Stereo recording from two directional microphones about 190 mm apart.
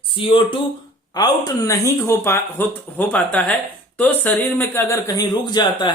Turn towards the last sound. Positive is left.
turn(degrees=20)  # may be behind; listen again after turning